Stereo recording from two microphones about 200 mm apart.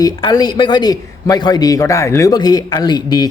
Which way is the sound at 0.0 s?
20° left (ahead or behind).